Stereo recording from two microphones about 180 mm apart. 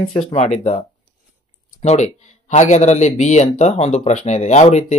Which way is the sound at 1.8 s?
40° left (ahead or behind).